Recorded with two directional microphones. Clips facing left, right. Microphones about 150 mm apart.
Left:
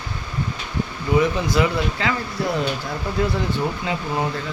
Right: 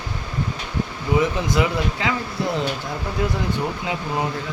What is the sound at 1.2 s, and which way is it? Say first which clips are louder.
A man's voice: left 1 dB; 20° right (ahead or behind).